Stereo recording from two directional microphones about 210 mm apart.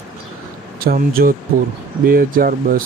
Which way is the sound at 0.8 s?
45° right (ahead or behind).